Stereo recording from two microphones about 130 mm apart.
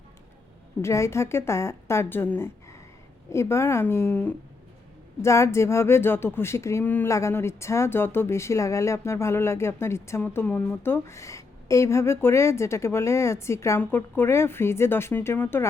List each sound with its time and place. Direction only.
0.8 s speech: 20° left (ahead or behind)